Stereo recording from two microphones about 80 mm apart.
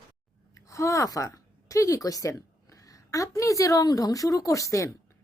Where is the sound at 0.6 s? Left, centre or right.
Left.